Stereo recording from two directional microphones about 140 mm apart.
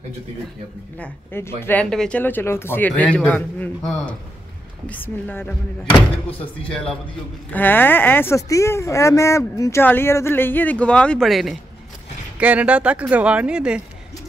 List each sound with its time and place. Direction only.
0.9 s speech: 15° left (ahead or behind)
5.9 s speech: 40° left (ahead or behind)
6.7 s a man's voice: 5° left (ahead or behind)